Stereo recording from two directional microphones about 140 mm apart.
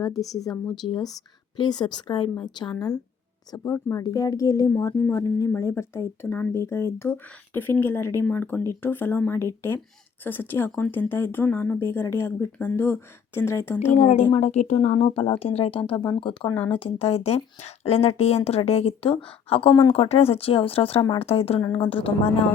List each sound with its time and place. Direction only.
0.0 s a woman's voice: 25° left (ahead or behind)
13.9 s a woman's voice: 55° left (ahead or behind)